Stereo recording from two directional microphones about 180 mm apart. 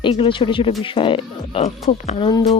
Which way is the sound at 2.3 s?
25° left (ahead or behind).